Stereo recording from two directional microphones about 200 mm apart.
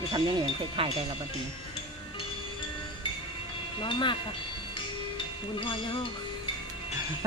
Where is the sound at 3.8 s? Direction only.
25° left (ahead or behind).